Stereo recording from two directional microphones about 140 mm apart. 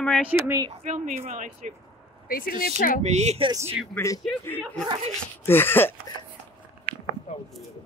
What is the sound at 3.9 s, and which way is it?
Speech, 20° left (ahead or behind).